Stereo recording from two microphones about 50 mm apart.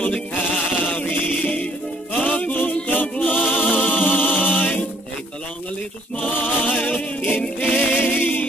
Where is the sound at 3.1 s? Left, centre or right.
Left.